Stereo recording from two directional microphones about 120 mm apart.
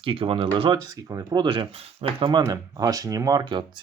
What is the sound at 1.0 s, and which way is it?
Speech, 30° right (ahead or behind).